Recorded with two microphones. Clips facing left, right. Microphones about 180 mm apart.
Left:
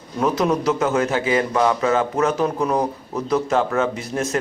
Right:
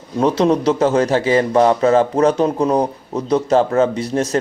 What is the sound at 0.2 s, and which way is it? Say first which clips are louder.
A man's voice: right 5 dB; 30° right (ahead or behind).